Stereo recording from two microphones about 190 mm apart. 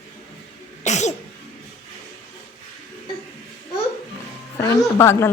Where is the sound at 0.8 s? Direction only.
35° left (ahead or behind).